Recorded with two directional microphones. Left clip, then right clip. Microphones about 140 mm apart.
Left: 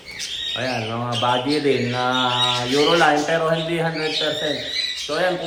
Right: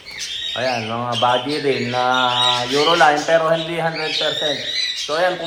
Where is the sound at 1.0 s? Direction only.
5° right (ahead or behind).